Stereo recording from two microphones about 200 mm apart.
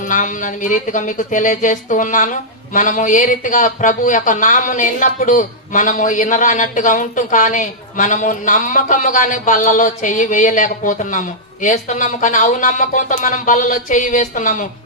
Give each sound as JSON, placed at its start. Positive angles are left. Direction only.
{"t": 0.0, "sound": "speech", "side_deg": 40}